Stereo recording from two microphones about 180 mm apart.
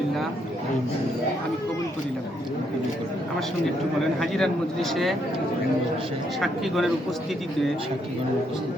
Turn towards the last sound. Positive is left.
turn(degrees=0)  # may be behind; listen again after turning